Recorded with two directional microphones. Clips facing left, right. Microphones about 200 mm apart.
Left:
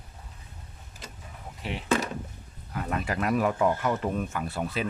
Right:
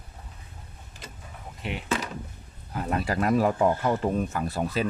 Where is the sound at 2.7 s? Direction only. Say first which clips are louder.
Right 3 dB; 35° right (ahead or behind).